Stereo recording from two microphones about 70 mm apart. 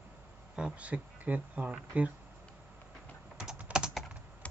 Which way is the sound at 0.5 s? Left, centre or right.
Centre.